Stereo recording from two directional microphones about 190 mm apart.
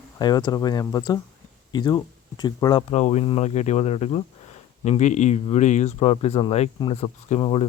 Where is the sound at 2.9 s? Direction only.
35° left (ahead or behind).